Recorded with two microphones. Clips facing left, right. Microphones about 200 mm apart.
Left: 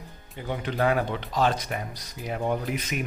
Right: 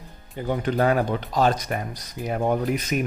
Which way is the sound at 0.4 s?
45° right (ahead or behind).